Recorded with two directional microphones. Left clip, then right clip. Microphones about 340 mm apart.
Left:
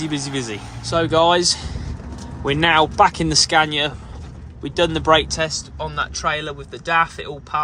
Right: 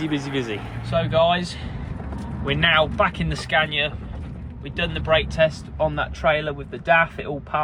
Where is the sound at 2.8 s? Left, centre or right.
Centre.